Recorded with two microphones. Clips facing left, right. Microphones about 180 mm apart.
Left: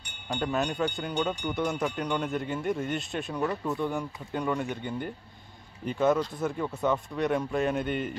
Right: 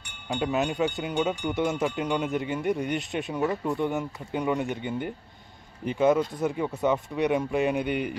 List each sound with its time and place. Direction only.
0.3 s speech: 15° right (ahead or behind)